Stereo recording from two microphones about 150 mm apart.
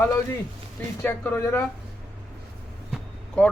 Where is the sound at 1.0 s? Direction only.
15° left (ahead or behind).